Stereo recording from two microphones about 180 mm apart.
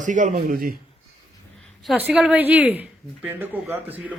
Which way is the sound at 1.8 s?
5° right (ahead or behind).